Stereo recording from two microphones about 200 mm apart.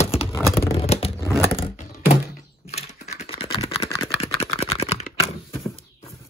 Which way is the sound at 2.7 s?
35° left (ahead or behind).